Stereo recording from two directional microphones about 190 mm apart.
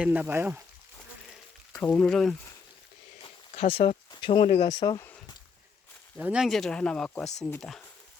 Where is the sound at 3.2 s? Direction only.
30° left (ahead or behind).